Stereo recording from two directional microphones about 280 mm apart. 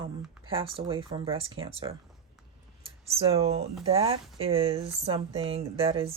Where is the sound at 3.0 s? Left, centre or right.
Right.